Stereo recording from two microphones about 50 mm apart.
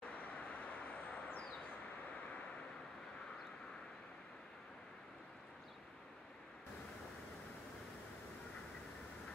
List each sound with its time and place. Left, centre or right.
0.6 s vehicle: left